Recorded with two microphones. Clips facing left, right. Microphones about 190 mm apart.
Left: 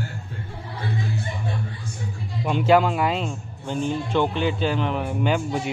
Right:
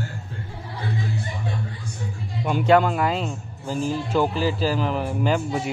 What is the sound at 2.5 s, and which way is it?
A man's voice, centre (ahead or behind).